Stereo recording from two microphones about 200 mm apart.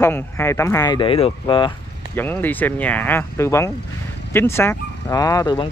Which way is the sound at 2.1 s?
10° left (ahead or behind).